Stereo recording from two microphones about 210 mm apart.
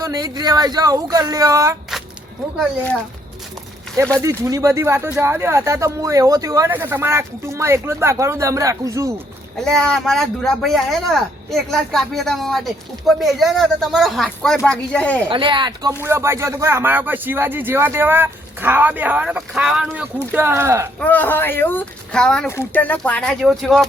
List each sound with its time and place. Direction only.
0.0 s speech: 15° right (ahead or behind)
1.9 s a sound: centre (ahead or behind)
2.6 s speech: 5° left (ahead or behind)
4.2 s speech: 15° right (ahead or behind)
9.6 s speech: centre (ahead or behind)
15.3 s speech: 25° right (ahead or behind)
15.9 s speech: 10° right (ahead or behind)
21.0 s speech: 10° left (ahead or behind)